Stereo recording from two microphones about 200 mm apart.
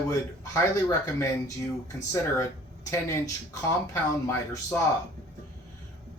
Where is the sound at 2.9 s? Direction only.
15° left (ahead or behind).